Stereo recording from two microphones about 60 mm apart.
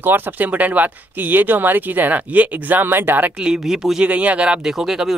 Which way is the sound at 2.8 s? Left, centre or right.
Right.